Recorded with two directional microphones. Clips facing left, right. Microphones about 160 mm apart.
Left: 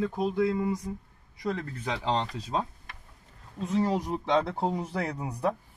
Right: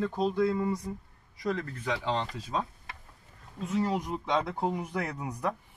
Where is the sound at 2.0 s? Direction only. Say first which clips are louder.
Left 2 dB; 35° left (ahead or behind).